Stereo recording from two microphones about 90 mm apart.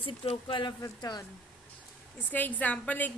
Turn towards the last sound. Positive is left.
turn(degrees=15)  # may be behind; listen again after turning